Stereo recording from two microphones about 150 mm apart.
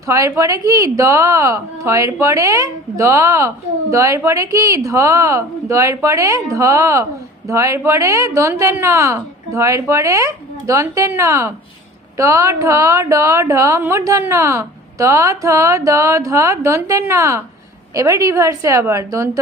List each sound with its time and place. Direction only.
0.1 s a woman's voice: 20° right (ahead or behind)